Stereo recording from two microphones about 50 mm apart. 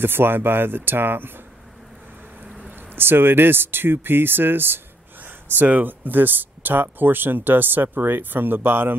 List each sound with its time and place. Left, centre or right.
0.0 s speech: right
3.0 s speech: right